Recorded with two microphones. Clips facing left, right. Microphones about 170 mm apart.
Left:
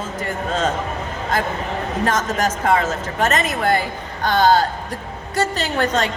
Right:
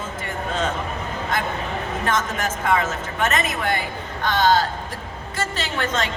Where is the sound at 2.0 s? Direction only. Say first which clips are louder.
Left 5 dB; 40° left (ahead or behind).